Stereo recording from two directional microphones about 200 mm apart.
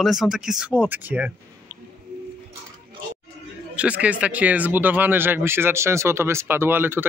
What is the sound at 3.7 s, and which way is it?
Speech, 5° right (ahead or behind).